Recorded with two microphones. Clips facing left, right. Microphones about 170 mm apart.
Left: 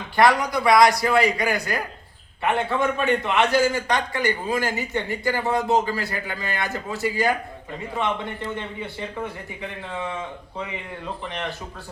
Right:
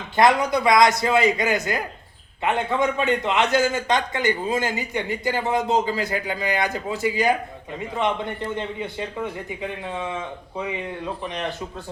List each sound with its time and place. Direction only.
0.2 s a man's voice: 20° right (ahead or behind)
11.2 s a man's voice: 20° right (ahead or behind)